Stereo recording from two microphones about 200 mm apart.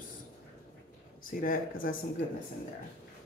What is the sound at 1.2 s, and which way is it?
Speech, 45° left (ahead or behind).